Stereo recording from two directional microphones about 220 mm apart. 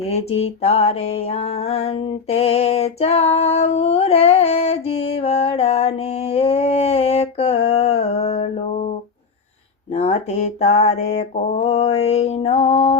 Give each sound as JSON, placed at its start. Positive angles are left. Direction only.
{"t": 0.0, "sound": "mantra", "side_deg": 30}
{"t": 9.9, "sound": "mantra", "side_deg": 30}